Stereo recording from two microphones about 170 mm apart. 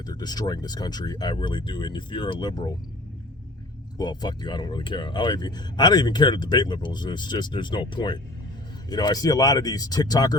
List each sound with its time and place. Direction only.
0.0 s speech: 25° left (ahead or behind)
3.9 s speech: 25° left (ahead or behind)